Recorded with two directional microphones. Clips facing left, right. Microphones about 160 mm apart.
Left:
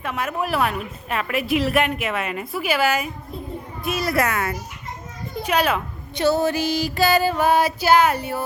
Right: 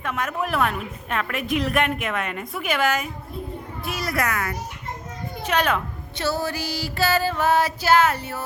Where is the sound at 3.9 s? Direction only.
25° left (ahead or behind).